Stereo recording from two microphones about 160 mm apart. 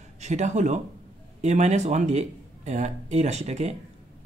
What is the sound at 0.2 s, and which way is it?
Speech, 45° right (ahead or behind).